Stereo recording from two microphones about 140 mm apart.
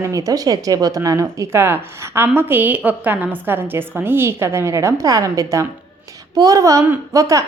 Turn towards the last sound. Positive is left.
turn(degrees=-25)  # may be behind; listen again after turning